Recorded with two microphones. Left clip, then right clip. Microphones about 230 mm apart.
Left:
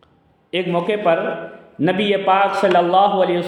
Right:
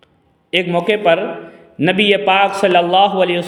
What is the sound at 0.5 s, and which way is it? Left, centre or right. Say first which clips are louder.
A man's voice: right 4 dB; right.